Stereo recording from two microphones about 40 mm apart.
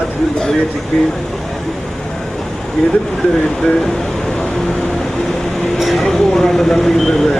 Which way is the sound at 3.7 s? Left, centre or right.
Centre.